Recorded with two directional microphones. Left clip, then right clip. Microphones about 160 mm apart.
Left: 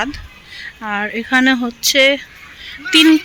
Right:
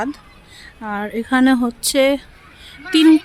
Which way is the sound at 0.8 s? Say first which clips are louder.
Left 3 dB; 10° right (ahead or behind).